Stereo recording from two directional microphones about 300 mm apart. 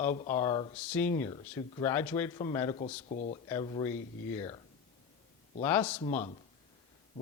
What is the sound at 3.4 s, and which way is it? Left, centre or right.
Speech, centre.